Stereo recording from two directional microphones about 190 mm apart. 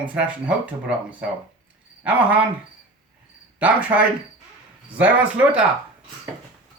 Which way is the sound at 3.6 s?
5° right (ahead or behind).